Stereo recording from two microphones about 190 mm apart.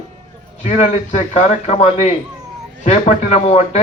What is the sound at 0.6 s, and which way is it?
Speech, 40° left (ahead or behind).